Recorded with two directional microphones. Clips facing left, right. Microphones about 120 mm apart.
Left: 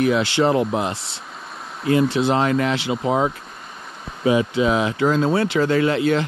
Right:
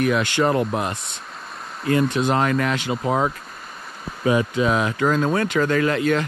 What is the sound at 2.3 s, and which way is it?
Speech, 30° left (ahead or behind).